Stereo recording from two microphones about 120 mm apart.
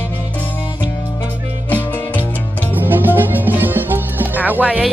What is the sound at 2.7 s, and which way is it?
Music, 15° right (ahead or behind).